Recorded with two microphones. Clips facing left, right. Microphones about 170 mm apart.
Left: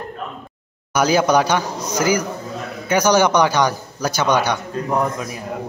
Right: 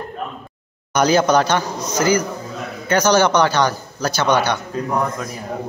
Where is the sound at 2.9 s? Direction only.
15° left (ahead or behind).